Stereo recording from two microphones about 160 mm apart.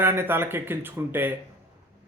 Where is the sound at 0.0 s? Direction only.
15° right (ahead or behind).